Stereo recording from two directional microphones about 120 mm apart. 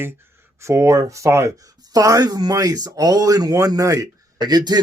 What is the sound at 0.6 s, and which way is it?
Speech, 25° right (ahead or behind).